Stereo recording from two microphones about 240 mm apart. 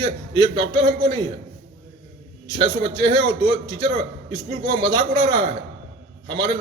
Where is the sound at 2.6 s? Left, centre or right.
Centre.